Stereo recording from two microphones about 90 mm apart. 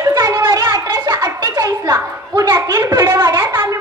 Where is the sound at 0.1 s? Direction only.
45° right (ahead or behind); by 3.2 s 30° right (ahead or behind).